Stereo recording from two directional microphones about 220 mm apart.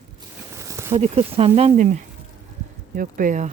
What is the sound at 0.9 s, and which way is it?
Speech, 30° right (ahead or behind).